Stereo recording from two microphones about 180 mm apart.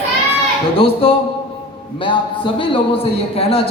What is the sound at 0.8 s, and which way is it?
A man's voice, 30° left (ahead or behind).